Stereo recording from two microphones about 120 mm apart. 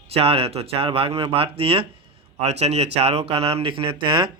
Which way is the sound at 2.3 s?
65° right (ahead or behind).